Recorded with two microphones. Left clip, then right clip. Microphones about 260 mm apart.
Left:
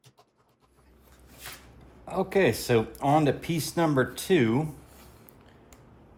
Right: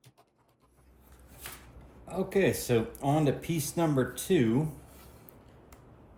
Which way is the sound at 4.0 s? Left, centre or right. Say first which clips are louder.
Left 4 dB; centre.